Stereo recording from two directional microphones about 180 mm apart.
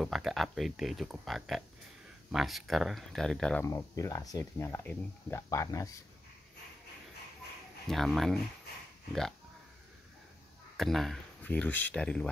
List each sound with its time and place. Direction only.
0.0 s speech: centre (ahead or behind)
3.6 s speech: 15° left (ahead or behind)
7.9 s speech: centre (ahead or behind)
10.8 s speech: centre (ahead or behind)